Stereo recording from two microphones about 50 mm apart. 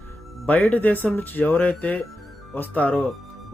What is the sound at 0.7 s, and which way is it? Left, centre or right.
Speech, left.